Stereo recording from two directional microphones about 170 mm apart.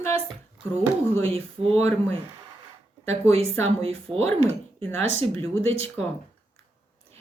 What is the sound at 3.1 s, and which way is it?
Speech, 35° right (ahead or behind).